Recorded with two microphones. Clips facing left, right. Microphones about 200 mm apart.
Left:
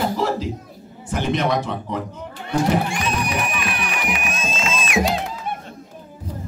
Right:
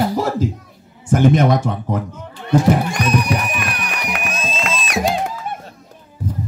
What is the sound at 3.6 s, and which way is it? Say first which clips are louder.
Music: even; 45° right (ahead or behind).